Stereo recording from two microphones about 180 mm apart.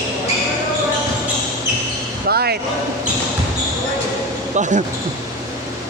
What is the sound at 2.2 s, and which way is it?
Speech, 60° right (ahead or behind).